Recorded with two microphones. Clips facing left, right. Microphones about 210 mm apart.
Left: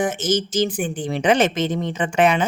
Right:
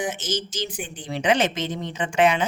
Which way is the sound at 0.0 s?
50° left (ahead or behind).